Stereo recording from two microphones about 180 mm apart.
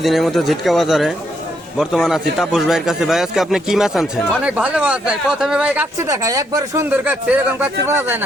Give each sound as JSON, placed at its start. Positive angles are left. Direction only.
{"t": 0.0, "sound": "speech", "side_deg": 0}
{"t": 6.1, "sound": "speech", "side_deg": -20}